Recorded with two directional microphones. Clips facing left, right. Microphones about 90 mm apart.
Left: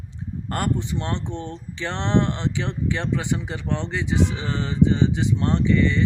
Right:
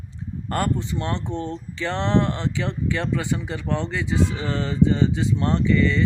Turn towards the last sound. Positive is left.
turn(degrees=20)  # may be behind; listen again after turning